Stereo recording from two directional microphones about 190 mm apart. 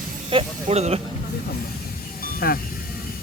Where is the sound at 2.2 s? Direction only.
50° left (ahead or behind).